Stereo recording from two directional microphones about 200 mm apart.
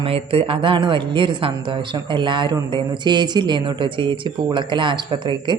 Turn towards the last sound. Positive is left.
turn(degrees=-20)  # may be behind; listen again after turning